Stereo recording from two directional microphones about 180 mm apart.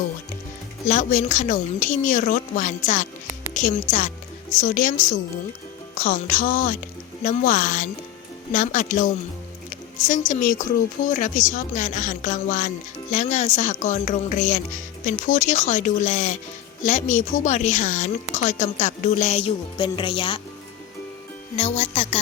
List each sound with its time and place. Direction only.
0.9 s a woman's voice: 45° left (ahead or behind)
21.5 s a woman's voice: 35° left (ahead or behind)